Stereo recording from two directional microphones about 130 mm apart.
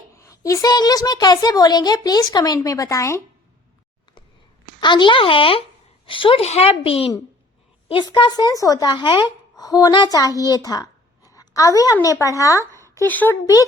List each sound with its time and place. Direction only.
0.1 s a woman's voice: 25° left (ahead or behind)
4.8 s speech: 35° left (ahead or behind)
11.3 s a sound: 25° left (ahead or behind)
12.0 s a woman's voice: 25° left (ahead or behind)